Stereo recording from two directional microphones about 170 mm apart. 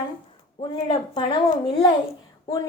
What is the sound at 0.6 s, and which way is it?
A woman's voice, 30° left (ahead or behind).